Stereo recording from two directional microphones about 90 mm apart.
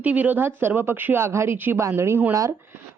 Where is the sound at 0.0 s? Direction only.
15° right (ahead or behind).